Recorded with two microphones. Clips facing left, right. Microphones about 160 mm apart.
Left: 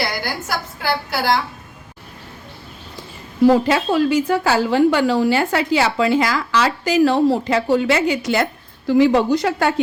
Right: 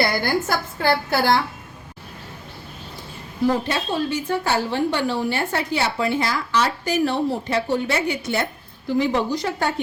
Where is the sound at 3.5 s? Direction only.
90° left.